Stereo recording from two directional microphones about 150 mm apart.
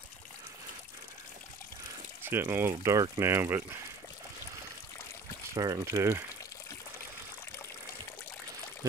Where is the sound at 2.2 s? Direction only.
15° right (ahead or behind).